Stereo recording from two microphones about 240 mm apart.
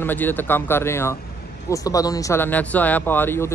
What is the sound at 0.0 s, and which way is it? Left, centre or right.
Speech, centre.